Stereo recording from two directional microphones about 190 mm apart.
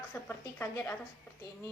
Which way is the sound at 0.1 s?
10° left (ahead or behind).